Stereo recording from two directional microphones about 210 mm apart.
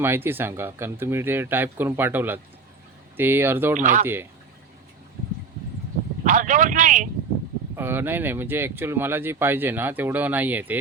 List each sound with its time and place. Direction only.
0.0 s speech: 10° right (ahead or behind)
3.8 s speech: 35° right (ahead or behind)
4.0 s speech: 10° right (ahead or behind)
6.2 s speech: 35° right (ahead or behind)
7.8 s speech: 10° right (ahead or behind)